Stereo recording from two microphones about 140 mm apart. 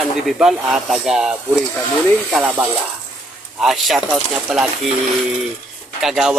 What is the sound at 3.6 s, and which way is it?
Speech, centre (ahead or behind).